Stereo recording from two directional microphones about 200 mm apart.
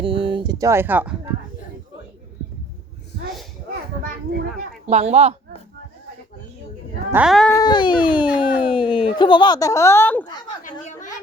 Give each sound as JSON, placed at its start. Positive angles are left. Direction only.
{"t": 0.0, "sound": "speech", "side_deg": -25}
{"t": 4.9, "sound": "speech", "side_deg": -35}
{"t": 7.1, "sound": "speech", "side_deg": -5}
{"t": 7.6, "sound": "speech", "side_deg": 20}